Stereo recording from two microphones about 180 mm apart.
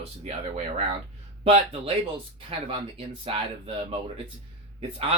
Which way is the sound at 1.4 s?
35° right (ahead or behind).